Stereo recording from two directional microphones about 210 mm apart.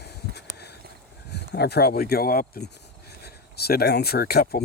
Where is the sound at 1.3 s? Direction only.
50° left (ahead or behind).